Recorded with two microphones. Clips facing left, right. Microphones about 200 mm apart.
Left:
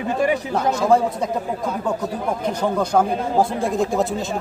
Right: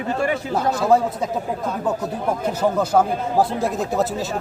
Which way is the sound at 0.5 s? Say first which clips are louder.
Right 1 dB; 5° right (ahead or behind).